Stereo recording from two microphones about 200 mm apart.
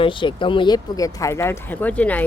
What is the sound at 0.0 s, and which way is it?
Speech, 25° left (ahead or behind).